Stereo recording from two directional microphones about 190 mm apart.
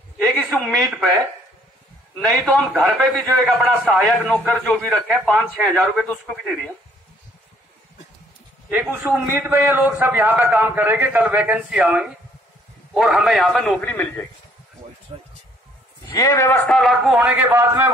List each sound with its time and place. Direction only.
0.3 s a woman's voice: centre (ahead or behind)
2.1 s a man's voice: centre (ahead or behind)
8.6 s a man's voice: 10° right (ahead or behind); by 14.2 s 10° left (ahead or behind)
15.1 s speech: 25° right (ahead or behind)
16.1 s a man's voice: 20° left (ahead or behind); by 17.8 s 10° right (ahead or behind)